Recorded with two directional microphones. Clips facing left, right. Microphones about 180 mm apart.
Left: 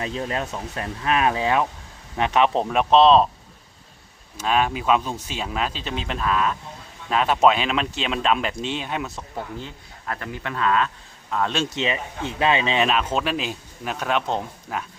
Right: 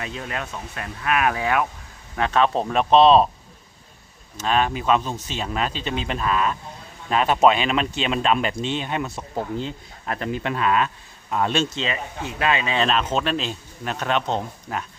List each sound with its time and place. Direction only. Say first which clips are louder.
0.0 s speech: left 4 dB; 30° left (ahead or behind)
2.6 s speech: right 1 dB; centre (ahead or behind)
4.4 s speech: even; 5° left (ahead or behind)
9.3 s speech: right 5 dB; 20° right (ahead or behind)
11.5 s speech: right 3 dB; 10° left (ahead or behind)
11.8 s speech: left 2 dB; 20° left (ahead or behind)
12.8 s speech: even; 10° left (ahead or behind)